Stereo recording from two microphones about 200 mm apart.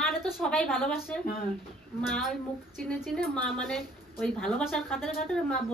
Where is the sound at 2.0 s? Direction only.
Centre (ahead or behind).